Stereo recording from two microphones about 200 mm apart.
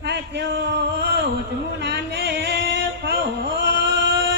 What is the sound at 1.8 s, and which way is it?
Music, 60° right (ahead or behind).